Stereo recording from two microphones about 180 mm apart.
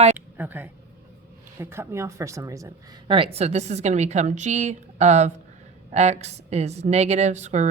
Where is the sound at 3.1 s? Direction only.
30° right (ahead or behind).